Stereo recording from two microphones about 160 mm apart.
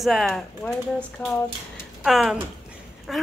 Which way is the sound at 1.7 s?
Centre (ahead or behind).